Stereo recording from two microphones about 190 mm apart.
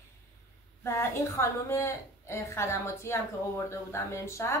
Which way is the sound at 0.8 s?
15° left (ahead or behind).